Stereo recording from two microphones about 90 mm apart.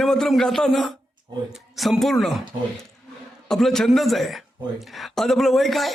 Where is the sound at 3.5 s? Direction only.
5° left (ahead or behind).